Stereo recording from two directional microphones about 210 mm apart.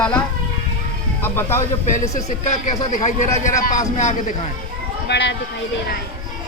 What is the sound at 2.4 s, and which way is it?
A man's voice, 35° left (ahead or behind).